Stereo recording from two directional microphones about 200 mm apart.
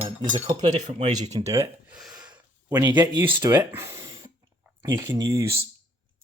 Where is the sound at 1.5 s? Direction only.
15° right (ahead or behind).